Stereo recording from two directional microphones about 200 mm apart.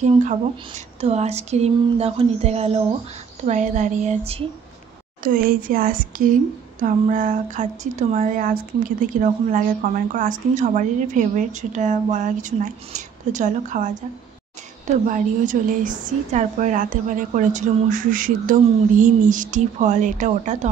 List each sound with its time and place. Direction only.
0.0 s speech: 35° right (ahead or behind)
5.2 s a woman's voice: 45° right (ahead or behind)
15.0 s speech: 40° right (ahead or behind)